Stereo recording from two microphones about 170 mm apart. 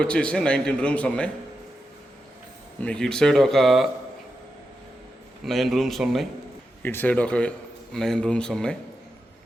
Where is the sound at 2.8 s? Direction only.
5° left (ahead or behind).